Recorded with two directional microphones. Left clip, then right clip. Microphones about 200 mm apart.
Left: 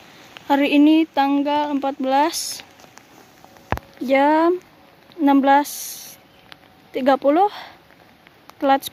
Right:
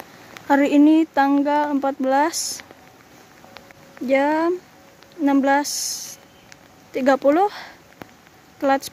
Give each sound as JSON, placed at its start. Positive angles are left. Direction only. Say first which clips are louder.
{"t": 0.5, "sound": "speech", "louder": "even", "side_deg": 5}
{"t": 4.1, "sound": "speech", "louder": "left 3 dB", "side_deg": 10}
{"t": 5.7, "sound": "speech", "louder": "right 7 dB", "side_deg": 25}
{"t": 6.9, "sound": "speech", "louder": "even", "side_deg": 5}